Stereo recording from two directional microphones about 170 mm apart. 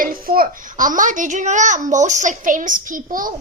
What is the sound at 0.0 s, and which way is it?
A woman's voice, 55° right (ahead or behind).